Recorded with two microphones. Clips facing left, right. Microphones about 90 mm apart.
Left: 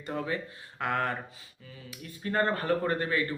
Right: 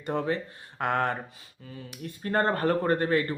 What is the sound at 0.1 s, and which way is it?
Speech, 60° right (ahead or behind).